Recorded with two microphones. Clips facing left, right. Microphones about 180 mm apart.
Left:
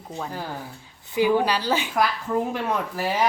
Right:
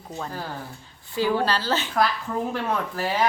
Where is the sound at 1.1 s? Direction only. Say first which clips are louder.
Left 3 dB; 15° left (ahead or behind).